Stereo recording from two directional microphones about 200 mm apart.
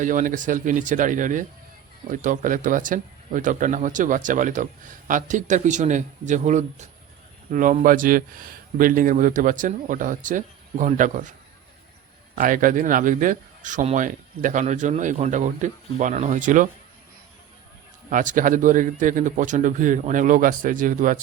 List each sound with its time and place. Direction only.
0.0 s speech: 40° right (ahead or behind)
12.4 s speech: 45° right (ahead or behind)
18.1 s speech: 40° right (ahead or behind)